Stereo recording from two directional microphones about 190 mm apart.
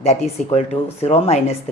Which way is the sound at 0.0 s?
35° left (ahead or behind).